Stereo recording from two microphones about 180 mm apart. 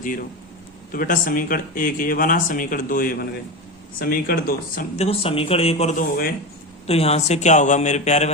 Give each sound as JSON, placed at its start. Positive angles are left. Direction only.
{"t": 0.0, "sound": "speech", "side_deg": 50}
{"t": 4.9, "sound": "speech", "side_deg": 35}